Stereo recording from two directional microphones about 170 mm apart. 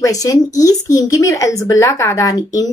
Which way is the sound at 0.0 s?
20° left (ahead or behind).